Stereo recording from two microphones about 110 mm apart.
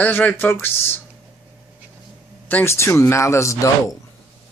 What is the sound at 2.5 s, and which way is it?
A man's voice, 25° left (ahead or behind).